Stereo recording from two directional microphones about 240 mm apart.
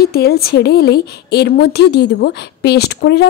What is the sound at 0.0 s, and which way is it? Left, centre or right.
Speech, left.